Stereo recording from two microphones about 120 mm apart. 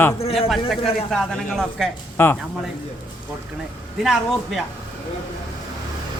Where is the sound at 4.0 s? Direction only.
Centre (ahead or behind).